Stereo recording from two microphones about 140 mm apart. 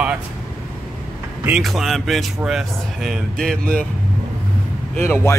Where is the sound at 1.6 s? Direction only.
Centre (ahead or behind).